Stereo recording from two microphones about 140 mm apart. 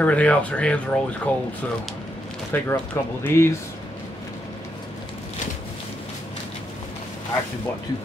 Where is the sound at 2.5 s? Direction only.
15° left (ahead or behind).